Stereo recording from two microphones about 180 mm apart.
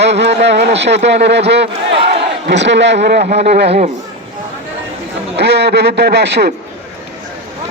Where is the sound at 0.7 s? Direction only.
75° right (ahead or behind).